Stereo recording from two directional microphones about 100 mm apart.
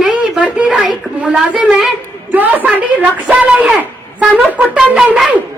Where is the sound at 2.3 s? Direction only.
20° right (ahead or behind).